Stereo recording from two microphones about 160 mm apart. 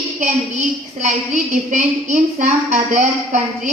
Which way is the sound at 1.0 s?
50° right (ahead or behind).